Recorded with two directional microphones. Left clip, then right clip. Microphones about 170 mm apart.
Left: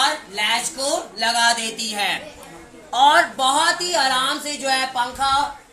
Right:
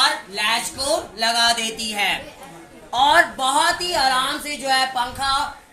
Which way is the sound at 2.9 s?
Centre (ahead or behind).